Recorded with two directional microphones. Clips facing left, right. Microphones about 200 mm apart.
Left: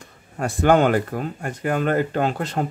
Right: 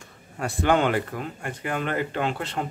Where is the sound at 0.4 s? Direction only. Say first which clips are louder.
Left 5 dB; 45° left (ahead or behind).